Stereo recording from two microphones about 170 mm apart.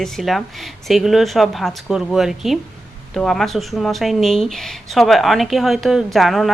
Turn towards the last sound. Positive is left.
turn(degrees=0)  # may be behind; listen again after turning